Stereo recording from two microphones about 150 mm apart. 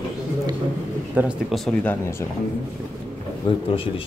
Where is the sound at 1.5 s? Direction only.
5° left (ahead or behind).